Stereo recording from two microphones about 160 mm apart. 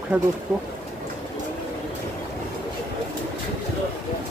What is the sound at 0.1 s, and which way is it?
Speech, 10° right (ahead or behind).